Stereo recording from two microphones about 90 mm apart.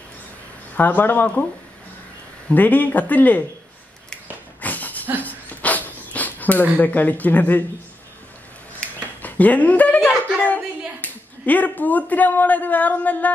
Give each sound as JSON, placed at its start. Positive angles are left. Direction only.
{"t": 0.7, "sound": "speech", "side_deg": 20}
{"t": 2.5, "sound": "speech", "side_deg": 20}
{"t": 4.6, "sound": "a sound", "side_deg": 20}
{"t": 5.2, "sound": "dog", "side_deg": 20}
{"t": 6.8, "sound": "speech", "side_deg": 20}
{"t": 9.2, "sound": "dog", "side_deg": 15}
{"t": 10.0, "sound": "a sound", "side_deg": 15}
{"t": 11.0, "sound": "speech", "side_deg": 20}